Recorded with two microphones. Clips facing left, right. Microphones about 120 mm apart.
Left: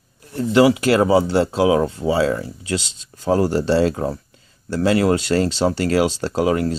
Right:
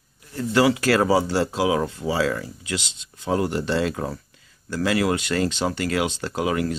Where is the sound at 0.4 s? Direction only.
25° left (ahead or behind).